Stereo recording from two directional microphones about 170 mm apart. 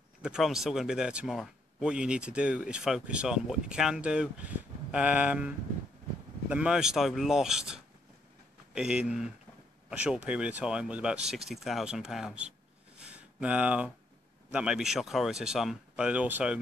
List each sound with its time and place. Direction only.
0.2 s speech: 5° right (ahead or behind)
6.5 s speech: 5° right (ahead or behind)
12.9 s a sound: 5° right (ahead or behind)
14.5 s speech: 5° right (ahead or behind)